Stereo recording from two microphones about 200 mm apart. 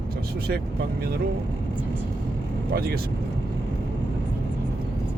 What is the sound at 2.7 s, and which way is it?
Speech, 50° right (ahead or behind).